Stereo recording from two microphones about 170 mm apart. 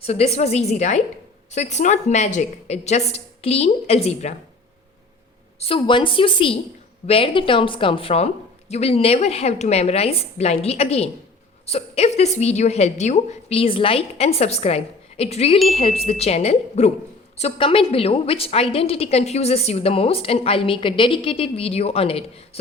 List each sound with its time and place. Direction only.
0.0 s a woman's voice: 40° left (ahead or behind)
5.5 s a woman's voice: 35° left (ahead or behind)